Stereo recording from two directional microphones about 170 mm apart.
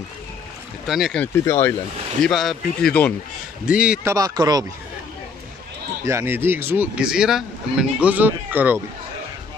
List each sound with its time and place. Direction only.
0.8 s speech: centre (ahead or behind)
1.2 s speech: 15° left (ahead or behind)
2.2 s speech: centre (ahead or behind)
3.6 s speech: 5° right (ahead or behind)
4.1 s speech: 20° right (ahead or behind)
6.0 s speech: 15° right (ahead or behind)